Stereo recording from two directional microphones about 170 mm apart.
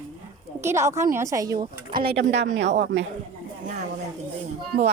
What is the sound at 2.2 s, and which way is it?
Speech, 90° right.